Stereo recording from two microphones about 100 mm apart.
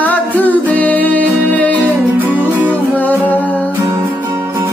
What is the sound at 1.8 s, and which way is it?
Music, 15° right (ahead or behind).